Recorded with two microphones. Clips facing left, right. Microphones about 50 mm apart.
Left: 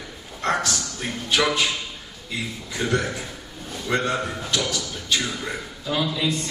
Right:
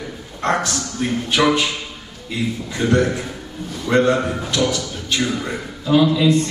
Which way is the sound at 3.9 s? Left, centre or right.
Right.